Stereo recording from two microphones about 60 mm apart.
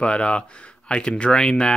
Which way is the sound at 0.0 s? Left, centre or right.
Centre.